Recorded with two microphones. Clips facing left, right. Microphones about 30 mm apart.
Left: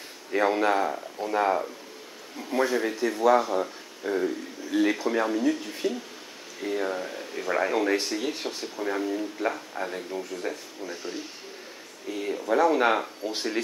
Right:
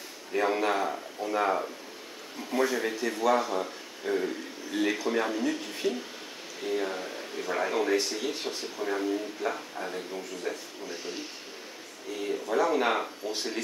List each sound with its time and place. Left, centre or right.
0.5 s speech: centre
7.3 s speech: centre
12.1 s speech: centre
13.2 s speech: left